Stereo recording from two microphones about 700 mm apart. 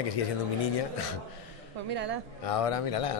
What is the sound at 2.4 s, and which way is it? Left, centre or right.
Speech, left.